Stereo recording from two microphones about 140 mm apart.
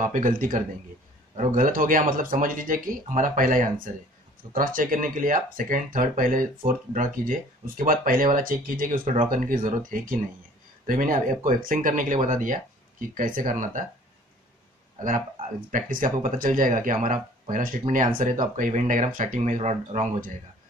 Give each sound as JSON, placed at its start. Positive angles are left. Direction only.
{"t": 0.0, "sound": "speech", "side_deg": -65}
{"t": 13.1, "sound": "speech", "side_deg": -75}
{"t": 15.0, "sound": "speech", "side_deg": -70}